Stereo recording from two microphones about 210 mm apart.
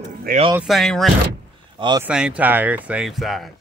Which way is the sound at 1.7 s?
20° right (ahead or behind).